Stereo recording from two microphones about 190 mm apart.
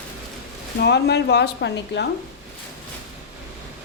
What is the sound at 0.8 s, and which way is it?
A woman's voice, 60° left (ahead or behind).